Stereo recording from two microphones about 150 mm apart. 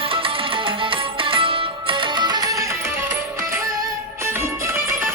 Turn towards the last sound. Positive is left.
turn(degrees=-15)  # may be behind; listen again after turning